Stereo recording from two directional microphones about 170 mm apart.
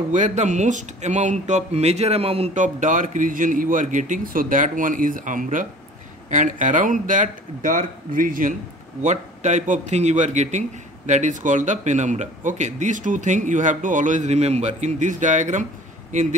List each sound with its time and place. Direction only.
0.1 s speech: 45° right (ahead or behind)